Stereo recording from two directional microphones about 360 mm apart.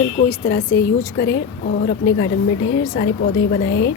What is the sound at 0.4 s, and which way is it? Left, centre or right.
A woman's voice, left.